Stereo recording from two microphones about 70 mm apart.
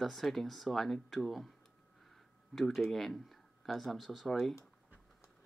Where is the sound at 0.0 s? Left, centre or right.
Centre.